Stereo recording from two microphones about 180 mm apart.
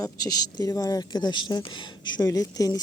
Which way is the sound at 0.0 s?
20° left (ahead or behind).